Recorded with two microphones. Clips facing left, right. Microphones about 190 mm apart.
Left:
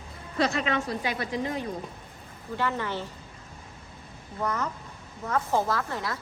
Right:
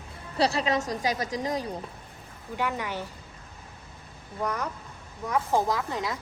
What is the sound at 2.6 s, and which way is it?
Speech, 15° right (ahead or behind).